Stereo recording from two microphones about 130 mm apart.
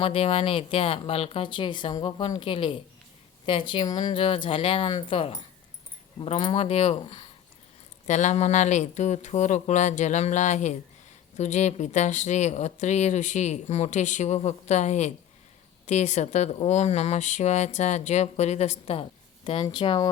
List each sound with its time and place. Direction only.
0.0 s speech: 50° left (ahead or behind)
7.0 s speech: 40° left (ahead or behind)
8.0 s speech: 65° left (ahead or behind)
19.6 s speech: 40° left (ahead or behind)